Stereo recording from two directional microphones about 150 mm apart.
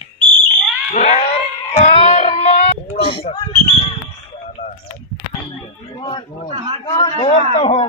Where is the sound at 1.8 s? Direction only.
45° left (ahead or behind).